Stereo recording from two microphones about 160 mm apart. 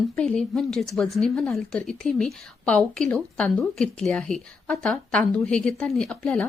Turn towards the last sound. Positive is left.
turn(degrees=5)  # may be behind; listen again after turning